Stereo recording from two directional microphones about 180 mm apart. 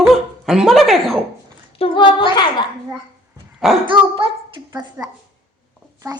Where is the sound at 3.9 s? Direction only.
25° right (ahead or behind).